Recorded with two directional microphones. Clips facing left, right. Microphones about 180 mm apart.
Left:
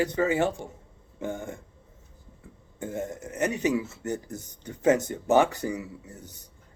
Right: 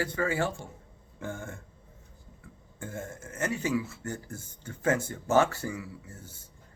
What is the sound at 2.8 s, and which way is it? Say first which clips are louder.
Speech: left 6 dB; 20° left (ahead or behind).